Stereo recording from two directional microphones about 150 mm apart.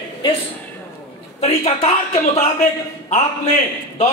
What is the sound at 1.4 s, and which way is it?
A man's voice, 45° left (ahead or behind).